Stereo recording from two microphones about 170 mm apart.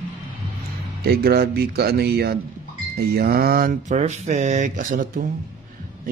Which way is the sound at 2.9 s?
65° right (ahead or behind).